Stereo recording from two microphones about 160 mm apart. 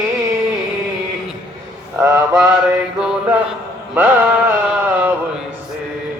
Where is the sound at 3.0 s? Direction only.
5° right (ahead or behind).